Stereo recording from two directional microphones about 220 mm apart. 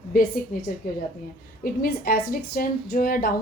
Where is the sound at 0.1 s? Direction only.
40° left (ahead or behind).